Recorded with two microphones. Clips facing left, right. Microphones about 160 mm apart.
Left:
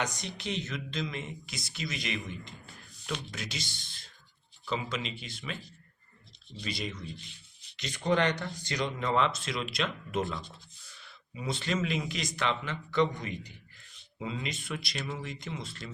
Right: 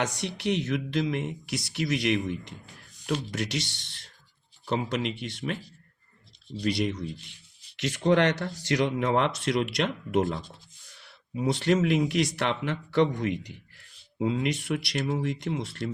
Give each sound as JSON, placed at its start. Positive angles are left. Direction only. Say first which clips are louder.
{"t": 0.0, "sound": "speech", "louder": "right 6 dB", "side_deg": -75}
{"t": 4.7, "sound": "speech", "louder": "right 6 dB", "side_deg": -65}
{"t": 6.6, "sound": "speech", "louder": "right 10 dB", "side_deg": -75}